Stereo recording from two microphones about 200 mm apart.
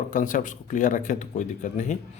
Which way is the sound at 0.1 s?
40° left (ahead or behind).